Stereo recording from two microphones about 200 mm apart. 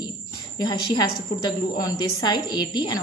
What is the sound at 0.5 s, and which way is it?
A woman's voice, 20° left (ahead or behind).